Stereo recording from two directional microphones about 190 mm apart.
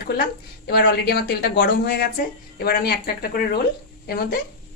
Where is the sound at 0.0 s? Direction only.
55° left (ahead or behind).